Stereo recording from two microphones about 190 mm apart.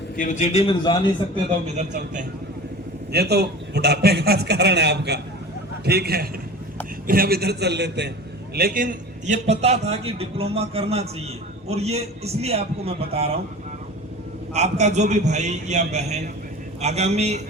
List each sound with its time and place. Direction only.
0.2 s a man's voice: 40° left (ahead or behind)
1.6 s a man's voice: 35° right (ahead or behind)
3.1 s a man's voice: 60° right (ahead or behind)
8.5 s a man's voice: 50° right (ahead or behind); by 13.3 s 30° right (ahead or behind)
14.5 s a man's voice: 35° right (ahead or behind)